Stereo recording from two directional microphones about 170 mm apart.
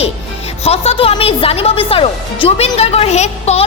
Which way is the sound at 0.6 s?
35° left (ahead or behind).